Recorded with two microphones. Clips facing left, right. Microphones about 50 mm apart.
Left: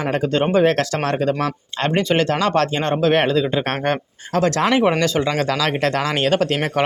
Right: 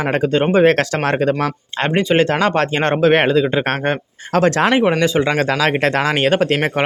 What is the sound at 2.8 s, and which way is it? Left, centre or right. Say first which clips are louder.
Speech: right 3 dB; right.